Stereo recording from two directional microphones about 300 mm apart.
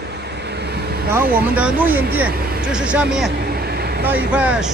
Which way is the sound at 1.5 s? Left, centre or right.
Centre.